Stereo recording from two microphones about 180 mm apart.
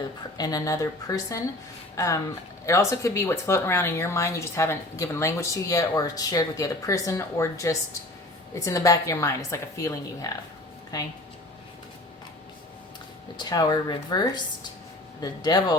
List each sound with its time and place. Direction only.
0.3 s speech: 20° left (ahead or behind)
13.3 s speech: 20° left (ahead or behind)